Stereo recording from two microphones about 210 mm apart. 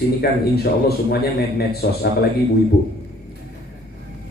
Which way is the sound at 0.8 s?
50° left (ahead or behind).